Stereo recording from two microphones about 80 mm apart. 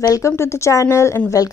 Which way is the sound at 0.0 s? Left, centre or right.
Left.